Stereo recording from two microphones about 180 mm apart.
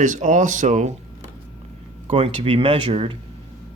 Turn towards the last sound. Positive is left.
turn(degrees=-30)  # may be behind; listen again after turning